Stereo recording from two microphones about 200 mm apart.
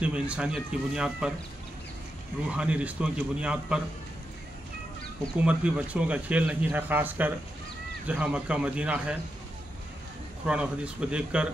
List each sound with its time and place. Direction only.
0.0 s speech: 5° right (ahead or behind)
2.5 s speech: 5° right (ahead or behind)
5.4 s speech: 5° right (ahead or behind)
10.4 s speech: 5° right (ahead or behind)